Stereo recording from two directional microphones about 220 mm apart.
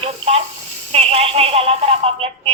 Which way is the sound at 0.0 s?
25° right (ahead or behind).